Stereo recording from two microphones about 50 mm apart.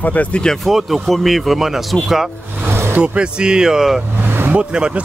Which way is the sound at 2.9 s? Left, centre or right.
Right.